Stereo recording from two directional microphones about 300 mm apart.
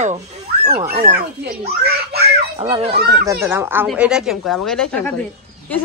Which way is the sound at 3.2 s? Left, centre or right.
Centre.